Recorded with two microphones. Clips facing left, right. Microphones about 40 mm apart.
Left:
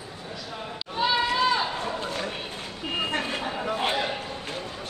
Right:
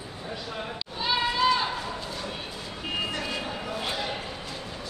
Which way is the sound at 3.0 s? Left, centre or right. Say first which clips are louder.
Left 3 dB; left.